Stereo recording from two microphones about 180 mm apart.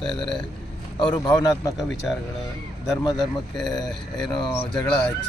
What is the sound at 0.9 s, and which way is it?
Speech, 25° left (ahead or behind).